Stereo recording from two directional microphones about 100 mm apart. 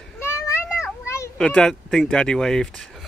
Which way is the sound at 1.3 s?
10° left (ahead or behind).